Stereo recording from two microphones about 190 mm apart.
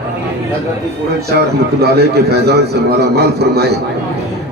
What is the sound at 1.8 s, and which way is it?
A man's voice, 55° right (ahead or behind).